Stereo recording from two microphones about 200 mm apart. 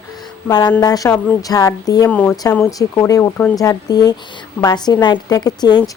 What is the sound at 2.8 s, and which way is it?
Speech, 15° left (ahead or behind).